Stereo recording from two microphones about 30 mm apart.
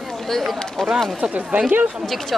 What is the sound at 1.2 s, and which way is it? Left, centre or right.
Speech, right.